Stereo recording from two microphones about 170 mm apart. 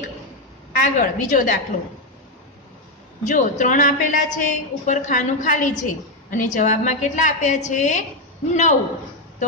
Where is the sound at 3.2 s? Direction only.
45° left (ahead or behind).